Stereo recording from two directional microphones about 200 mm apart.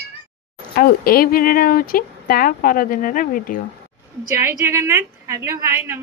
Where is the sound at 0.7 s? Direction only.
50° left (ahead or behind).